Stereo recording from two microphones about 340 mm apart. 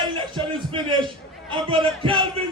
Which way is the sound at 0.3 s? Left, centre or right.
Centre.